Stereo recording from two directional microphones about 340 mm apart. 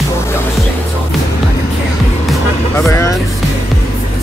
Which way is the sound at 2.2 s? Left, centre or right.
Centre.